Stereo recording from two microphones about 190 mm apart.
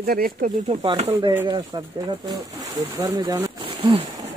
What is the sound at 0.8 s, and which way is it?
Speech, 25° right (ahead or behind).